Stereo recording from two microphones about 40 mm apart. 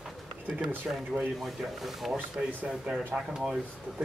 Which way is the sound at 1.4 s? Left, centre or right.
Centre.